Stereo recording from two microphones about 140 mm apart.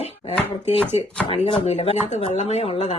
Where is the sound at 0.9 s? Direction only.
45° left (ahead or behind).